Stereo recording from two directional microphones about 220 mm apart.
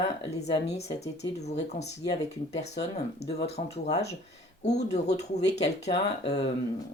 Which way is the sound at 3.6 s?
30° left (ahead or behind).